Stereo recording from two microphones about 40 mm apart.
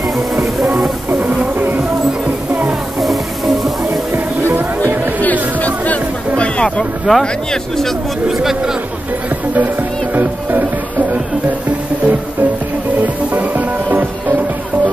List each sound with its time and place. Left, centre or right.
1.8 s music: right
3.0 s music: centre
4.1 s music: right
5.2 s music: left
6.3 s hubbub: left
6.8 s speech: centre
10.1 s music: right
13.0 s music: right